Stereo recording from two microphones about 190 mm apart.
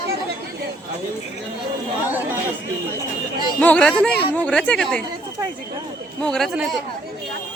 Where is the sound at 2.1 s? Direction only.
10° right (ahead or behind).